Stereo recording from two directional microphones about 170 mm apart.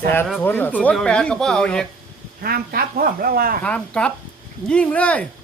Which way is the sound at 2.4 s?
60° right (ahead or behind).